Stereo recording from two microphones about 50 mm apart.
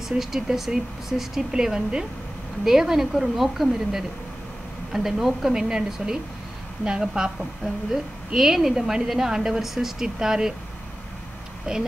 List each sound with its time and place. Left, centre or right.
0.2 s a woman's voice: centre
11.7 s a woman's voice: centre